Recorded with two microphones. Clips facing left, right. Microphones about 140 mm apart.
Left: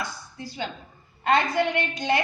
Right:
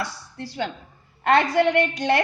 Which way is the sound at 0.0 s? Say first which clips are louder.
Right 3 dB; 75° right (ahead or behind).